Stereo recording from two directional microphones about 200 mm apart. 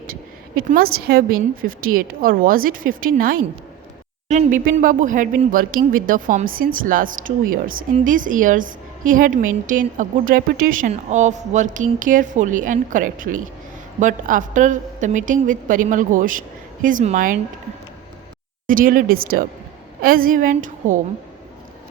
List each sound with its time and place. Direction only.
0.1 s a woman's voice: 45° right (ahead or behind)
18.7 s a woman's voice: 45° right (ahead or behind)